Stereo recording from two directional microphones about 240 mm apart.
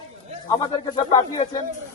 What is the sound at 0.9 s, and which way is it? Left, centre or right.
Speech, centre.